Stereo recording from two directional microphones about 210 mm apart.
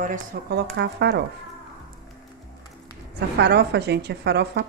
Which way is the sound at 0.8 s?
55° right (ahead or behind).